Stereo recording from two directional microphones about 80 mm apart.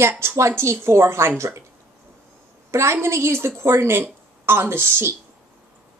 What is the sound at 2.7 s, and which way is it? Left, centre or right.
Speech, right.